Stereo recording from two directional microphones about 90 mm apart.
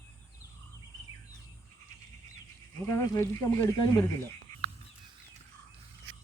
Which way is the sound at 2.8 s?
30° left (ahead or behind).